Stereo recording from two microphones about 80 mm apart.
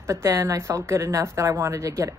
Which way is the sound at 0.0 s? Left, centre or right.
Right.